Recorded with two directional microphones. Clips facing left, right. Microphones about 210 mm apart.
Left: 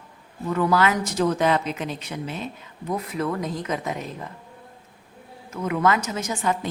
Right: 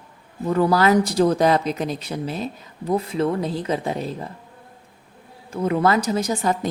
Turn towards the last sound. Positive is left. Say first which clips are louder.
# right 4 dB
turn(degrees=-35)  # may be behind; listen again after turning